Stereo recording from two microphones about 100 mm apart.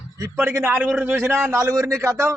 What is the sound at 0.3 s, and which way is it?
A man's voice, 20° right (ahead or behind).